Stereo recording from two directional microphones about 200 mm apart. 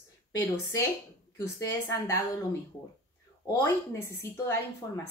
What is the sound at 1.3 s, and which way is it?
Speech, 15° left (ahead or behind).